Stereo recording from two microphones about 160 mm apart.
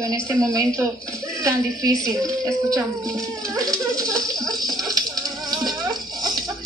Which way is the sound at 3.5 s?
20° right (ahead or behind).